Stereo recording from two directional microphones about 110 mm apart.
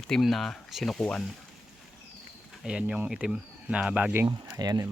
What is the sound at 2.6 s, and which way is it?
Speech, 10° right (ahead or behind).